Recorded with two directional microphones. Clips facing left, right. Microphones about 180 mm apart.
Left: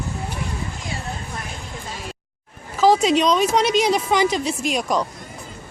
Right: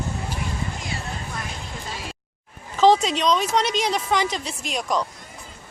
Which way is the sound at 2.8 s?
10° left (ahead or behind).